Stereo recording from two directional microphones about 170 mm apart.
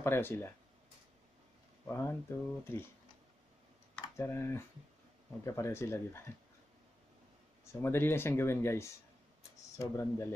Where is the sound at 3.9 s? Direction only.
15° left (ahead or behind).